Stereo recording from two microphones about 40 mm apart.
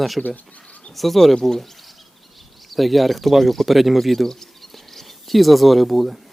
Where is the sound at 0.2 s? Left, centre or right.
Left.